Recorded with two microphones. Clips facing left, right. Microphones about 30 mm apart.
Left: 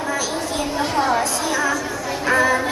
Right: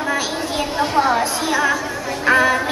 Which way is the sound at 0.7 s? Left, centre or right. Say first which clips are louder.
Right 3 dB; centre.